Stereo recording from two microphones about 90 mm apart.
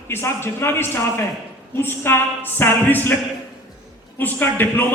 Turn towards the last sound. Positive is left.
turn(degrees=20)  # may be behind; listen again after turning